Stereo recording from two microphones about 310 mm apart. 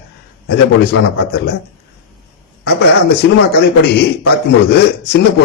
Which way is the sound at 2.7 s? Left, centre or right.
Left.